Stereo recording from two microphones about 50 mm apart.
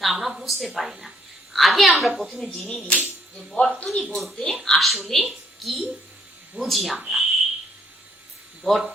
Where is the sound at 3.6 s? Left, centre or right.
Left.